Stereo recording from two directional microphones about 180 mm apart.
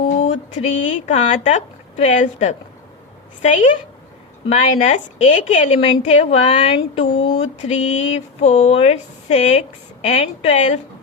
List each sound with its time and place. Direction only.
0.2 s a woman's voice: 40° left (ahead or behind)
4.8 s speech: 40° left (ahead or behind)